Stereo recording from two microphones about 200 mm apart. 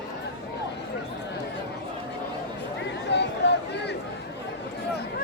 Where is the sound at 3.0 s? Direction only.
60° left (ahead or behind).